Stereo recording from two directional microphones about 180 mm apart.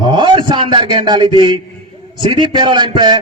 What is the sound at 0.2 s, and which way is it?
A man's voice, 25° right (ahead or behind).